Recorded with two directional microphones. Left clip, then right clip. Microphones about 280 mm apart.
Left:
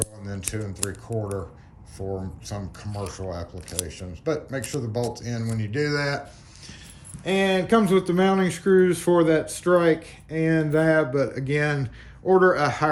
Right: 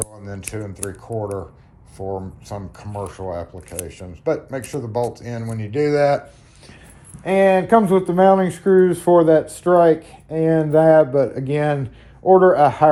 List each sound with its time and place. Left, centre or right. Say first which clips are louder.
0.3 s speech: right 3 dB; centre
2.5 s speech: right 6 dB; centre
7.3 s speech: right 7 dB; centre